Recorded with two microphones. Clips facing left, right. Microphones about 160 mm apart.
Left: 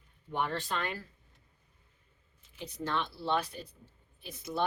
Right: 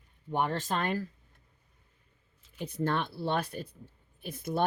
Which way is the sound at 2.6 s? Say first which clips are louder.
Right 4 dB; 50° right (ahead or behind).